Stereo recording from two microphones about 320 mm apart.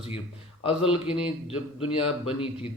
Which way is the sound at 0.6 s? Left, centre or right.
Centre.